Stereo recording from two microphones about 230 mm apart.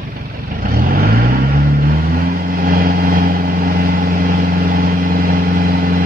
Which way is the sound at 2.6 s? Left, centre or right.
Right.